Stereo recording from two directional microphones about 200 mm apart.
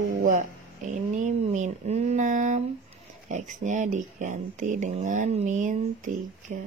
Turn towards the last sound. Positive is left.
turn(degrees=-40)  # may be behind; listen again after turning